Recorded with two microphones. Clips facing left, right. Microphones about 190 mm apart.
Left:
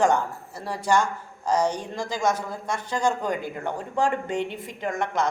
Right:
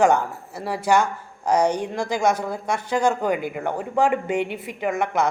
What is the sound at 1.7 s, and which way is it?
Speech, 65° right (ahead or behind).